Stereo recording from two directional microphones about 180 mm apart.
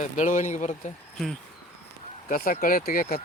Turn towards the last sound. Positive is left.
turn(degrees=50)  # may be behind; listen again after turning